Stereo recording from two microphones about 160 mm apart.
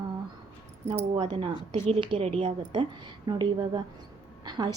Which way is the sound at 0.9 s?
25° right (ahead or behind).